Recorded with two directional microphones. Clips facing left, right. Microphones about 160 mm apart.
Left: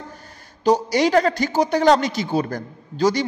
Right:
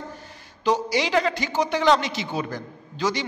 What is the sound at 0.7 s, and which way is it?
A man's voice, 45° left (ahead or behind).